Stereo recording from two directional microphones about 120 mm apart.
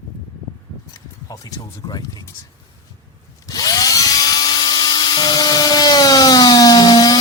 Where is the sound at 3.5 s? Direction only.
30° left (ahead or behind).